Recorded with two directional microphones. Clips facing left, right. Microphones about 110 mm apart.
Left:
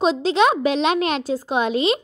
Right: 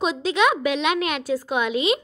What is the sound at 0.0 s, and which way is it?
Speech, 30° left (ahead or behind).